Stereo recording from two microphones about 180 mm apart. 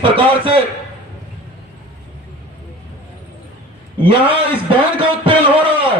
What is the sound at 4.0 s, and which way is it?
Speech, 30° right (ahead or behind).